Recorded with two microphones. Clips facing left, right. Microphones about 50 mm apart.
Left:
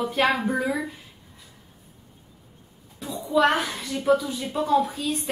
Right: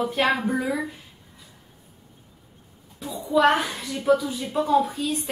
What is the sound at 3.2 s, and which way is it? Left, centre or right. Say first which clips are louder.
A woman's voice: right 1 dB; centre.